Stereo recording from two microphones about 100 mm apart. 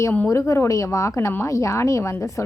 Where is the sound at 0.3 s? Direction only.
30° left (ahead or behind).